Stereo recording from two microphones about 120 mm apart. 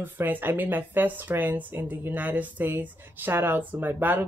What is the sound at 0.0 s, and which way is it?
Speech, 15° right (ahead or behind).